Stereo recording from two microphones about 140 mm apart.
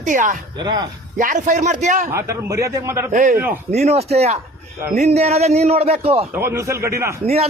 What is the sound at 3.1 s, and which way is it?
Speech, 70° right (ahead or behind).